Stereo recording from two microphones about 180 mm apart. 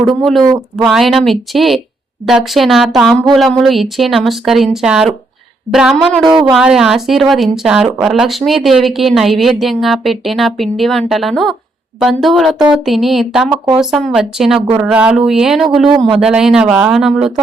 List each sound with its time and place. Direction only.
0.0 s speech: centre (ahead or behind)
6.2 s speech: 25° right (ahead or behind)
6.5 s speech: 5° right (ahead or behind)